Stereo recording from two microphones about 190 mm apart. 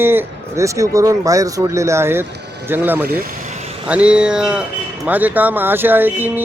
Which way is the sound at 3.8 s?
5° right (ahead or behind).